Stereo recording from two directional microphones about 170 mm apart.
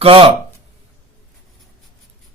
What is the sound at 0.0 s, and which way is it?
Speech, 30° right (ahead or behind).